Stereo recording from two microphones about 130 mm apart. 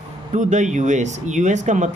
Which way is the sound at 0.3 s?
70° right (ahead or behind).